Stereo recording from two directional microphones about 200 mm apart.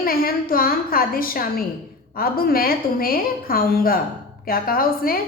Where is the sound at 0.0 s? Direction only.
45° left (ahead or behind).